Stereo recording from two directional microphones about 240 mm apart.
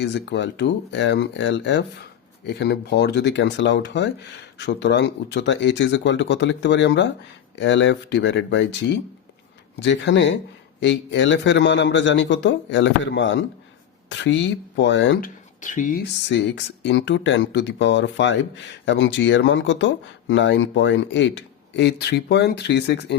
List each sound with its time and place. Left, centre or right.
0.0 s speech: left
9.8 s speech: left
15.6 s speech: left